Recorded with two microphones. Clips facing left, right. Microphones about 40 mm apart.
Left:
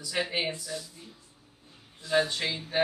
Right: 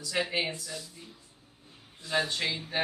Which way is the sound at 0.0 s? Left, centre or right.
Centre.